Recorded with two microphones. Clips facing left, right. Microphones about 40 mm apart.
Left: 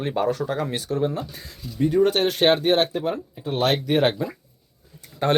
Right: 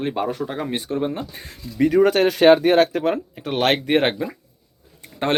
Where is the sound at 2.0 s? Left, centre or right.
Right.